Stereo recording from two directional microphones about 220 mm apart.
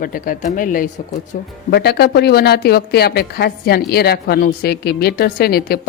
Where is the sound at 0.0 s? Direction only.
40° left (ahead or behind).